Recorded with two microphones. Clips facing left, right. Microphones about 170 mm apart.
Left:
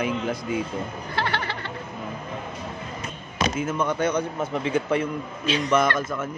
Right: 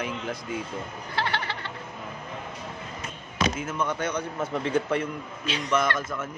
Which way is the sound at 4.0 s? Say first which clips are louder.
Left 5 dB; 15° left (ahead or behind).